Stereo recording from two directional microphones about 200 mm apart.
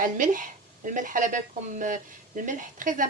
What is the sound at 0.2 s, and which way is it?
Speech, 40° right (ahead or behind).